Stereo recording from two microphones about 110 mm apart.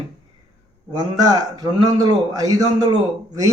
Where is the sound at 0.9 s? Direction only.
40° right (ahead or behind).